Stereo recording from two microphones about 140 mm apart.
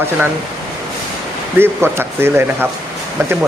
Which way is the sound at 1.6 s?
15° right (ahead or behind).